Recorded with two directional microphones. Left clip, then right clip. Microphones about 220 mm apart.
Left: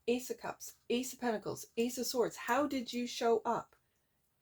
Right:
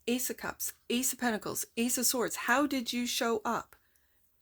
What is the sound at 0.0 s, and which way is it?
Speech, 40° right (ahead or behind).